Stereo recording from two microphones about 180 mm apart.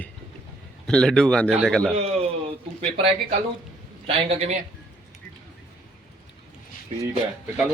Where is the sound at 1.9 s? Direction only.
35° right (ahead or behind).